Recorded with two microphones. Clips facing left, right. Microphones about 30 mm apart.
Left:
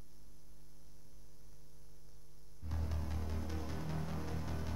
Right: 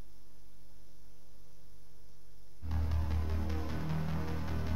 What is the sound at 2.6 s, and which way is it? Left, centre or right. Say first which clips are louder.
Music: right 4 dB; centre.